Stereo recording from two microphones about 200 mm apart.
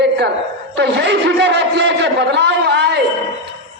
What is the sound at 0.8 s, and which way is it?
A man's voice, 55° right (ahead or behind).